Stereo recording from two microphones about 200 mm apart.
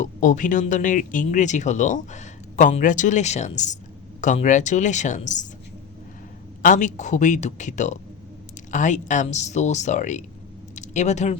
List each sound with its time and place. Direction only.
0.0 s speech: 40° left (ahead or behind)
6.6 s speech: 40° left (ahead or behind)